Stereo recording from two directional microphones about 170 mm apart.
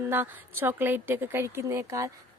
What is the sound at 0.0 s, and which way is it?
Speech, 15° right (ahead or behind).